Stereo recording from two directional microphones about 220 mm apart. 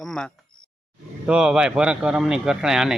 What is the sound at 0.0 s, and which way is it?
Speech, centre (ahead or behind).